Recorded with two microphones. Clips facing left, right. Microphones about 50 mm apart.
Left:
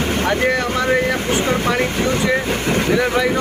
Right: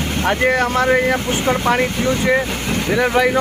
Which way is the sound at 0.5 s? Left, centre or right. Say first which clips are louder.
Right 3 dB; right.